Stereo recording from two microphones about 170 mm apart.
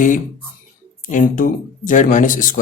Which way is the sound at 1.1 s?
50° left (ahead or behind).